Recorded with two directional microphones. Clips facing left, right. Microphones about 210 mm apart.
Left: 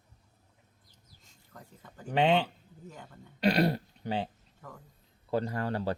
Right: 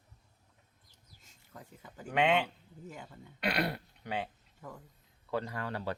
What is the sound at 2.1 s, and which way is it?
Speech, 30° left (ahead or behind).